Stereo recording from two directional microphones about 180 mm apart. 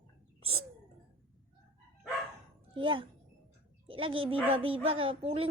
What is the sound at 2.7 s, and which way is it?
A woman's voice, 30° right (ahead or behind).